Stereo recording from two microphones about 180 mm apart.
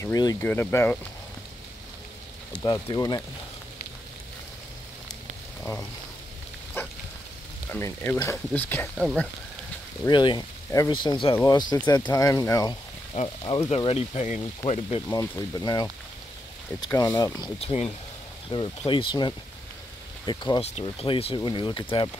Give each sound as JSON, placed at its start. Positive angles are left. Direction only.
{"t": 0.0, "sound": "speech", "side_deg": 20}
{"t": 2.5, "sound": "speech", "side_deg": 25}
{"t": 5.6, "sound": "speech", "side_deg": 15}
{"t": 7.7, "sound": "speech", "side_deg": 10}
{"t": 10.0, "sound": "speech", "side_deg": 25}
{"t": 13.1, "sound": "frying", "side_deg": 35}
{"t": 14.6, "sound": "speech", "side_deg": 25}
{"t": 17.6, "sound": "frying", "side_deg": 35}
{"t": 18.9, "sound": "speech", "side_deg": 25}
{"t": 20.7, "sound": "frying", "side_deg": 30}
{"t": 21.4, "sound": "speech", "side_deg": 25}